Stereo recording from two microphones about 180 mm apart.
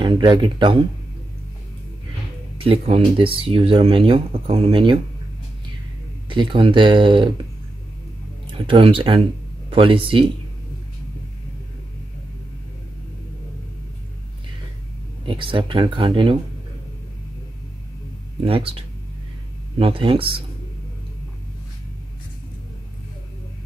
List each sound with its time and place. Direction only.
0.0 s speech: 25° right (ahead or behind)
2.6 s speech: 30° right (ahead or behind)
6.2 s speech: 25° right (ahead or behind)
8.6 s speech: 30° right (ahead or behind)
15.2 s speech: 30° right (ahead or behind)
18.4 s speech: 30° right (ahead or behind)